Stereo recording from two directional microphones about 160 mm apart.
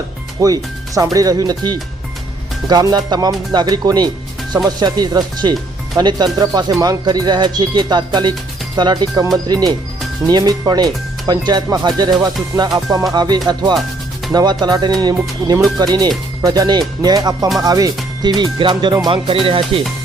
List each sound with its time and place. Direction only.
0.3 s speech: 20° right (ahead or behind)